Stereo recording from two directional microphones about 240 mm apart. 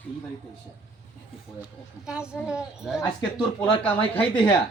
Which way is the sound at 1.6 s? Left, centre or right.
Centre.